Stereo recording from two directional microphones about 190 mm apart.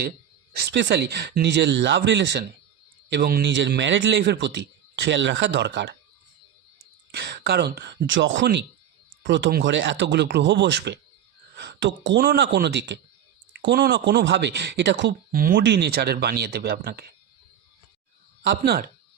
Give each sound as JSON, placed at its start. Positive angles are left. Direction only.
{"t": 0.5, "sound": "a man's voice", "side_deg": -60}
{"t": 7.1, "sound": "a man's voice", "side_deg": -60}
{"t": 9.7, "sound": "a man's voice", "side_deg": -75}
{"t": 15.3, "sound": "a man's voice", "side_deg": -50}
{"t": 18.4, "sound": "a man's voice", "side_deg": -60}